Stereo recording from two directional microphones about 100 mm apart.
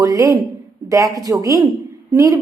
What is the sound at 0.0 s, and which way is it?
A woman's voice, 35° right (ahead or behind).